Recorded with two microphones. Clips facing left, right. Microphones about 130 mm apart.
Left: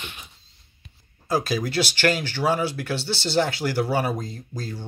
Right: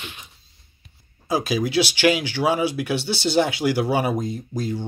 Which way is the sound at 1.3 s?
10° right (ahead or behind).